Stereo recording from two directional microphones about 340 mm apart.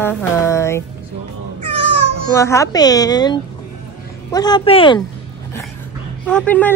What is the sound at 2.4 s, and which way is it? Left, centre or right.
Speech, centre.